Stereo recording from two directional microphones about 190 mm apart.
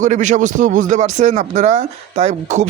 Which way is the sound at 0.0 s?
40° right (ahead or behind).